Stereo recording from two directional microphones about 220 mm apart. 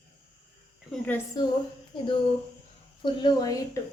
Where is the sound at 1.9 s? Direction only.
20° left (ahead or behind).